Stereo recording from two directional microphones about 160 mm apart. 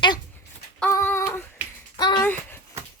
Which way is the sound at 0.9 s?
15° left (ahead or behind).